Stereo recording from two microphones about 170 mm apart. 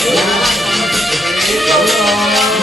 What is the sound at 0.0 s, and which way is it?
Music, centre (ahead or behind).